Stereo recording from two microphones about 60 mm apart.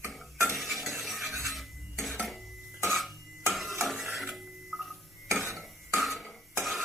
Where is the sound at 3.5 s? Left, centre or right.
Centre.